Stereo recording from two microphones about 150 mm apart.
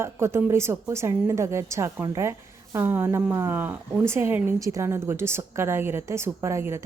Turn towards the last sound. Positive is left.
turn(degrees=-15)  # may be behind; listen again after turning